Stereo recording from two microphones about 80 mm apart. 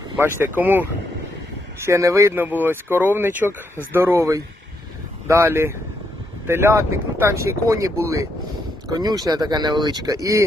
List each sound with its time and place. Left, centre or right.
0.2 s speech: right
1.8 s speech: right
2.3 s speech: right
5.3 s speech: right
8.9 s speech: right